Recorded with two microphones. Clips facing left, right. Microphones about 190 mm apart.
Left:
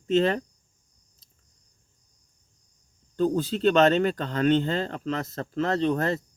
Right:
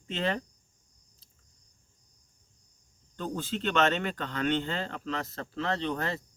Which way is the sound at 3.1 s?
40° left (ahead or behind).